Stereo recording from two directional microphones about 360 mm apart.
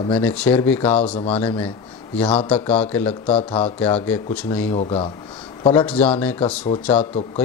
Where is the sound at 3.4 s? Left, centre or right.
Centre.